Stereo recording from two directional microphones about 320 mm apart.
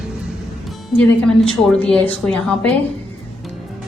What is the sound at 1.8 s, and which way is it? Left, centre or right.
Speech, centre.